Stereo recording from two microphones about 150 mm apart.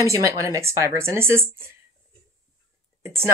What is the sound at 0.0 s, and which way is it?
A woman's voice, 20° right (ahead or behind).